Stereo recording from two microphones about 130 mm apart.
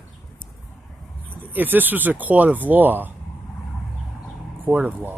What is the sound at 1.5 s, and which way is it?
Speech, 15° right (ahead or behind).